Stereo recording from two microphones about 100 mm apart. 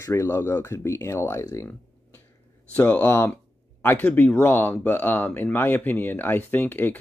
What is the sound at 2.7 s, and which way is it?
Speech, 20° left (ahead or behind).